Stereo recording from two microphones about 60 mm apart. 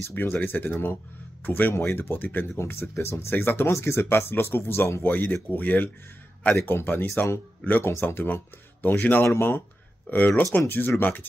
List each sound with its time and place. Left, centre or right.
0.0 s speech: left
2.5 s speech: left
5.0 s speech: left
8.8 s speech: left
9.2 s speech: left
10.0 s speech: left